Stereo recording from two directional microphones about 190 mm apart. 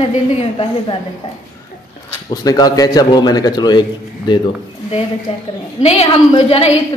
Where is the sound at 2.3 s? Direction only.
20° left (ahead or behind).